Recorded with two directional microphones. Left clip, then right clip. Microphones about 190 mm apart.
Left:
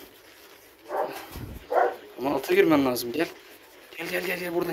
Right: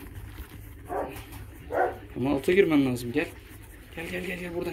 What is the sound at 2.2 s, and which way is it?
Speech, 35° left (ahead or behind).